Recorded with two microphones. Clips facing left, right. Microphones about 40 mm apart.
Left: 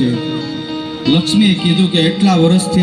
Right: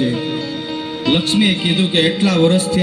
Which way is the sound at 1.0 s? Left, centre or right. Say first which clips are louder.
Left 3 dB; centre.